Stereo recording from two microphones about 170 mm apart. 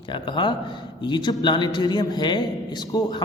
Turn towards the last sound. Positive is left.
turn(degrees=25)  # may be behind; listen again after turning